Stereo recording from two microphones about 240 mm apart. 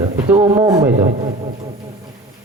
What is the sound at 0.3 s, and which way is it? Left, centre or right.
Speech, centre.